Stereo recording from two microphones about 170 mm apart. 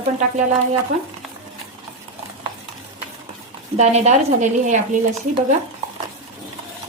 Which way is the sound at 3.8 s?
40° right (ahead or behind).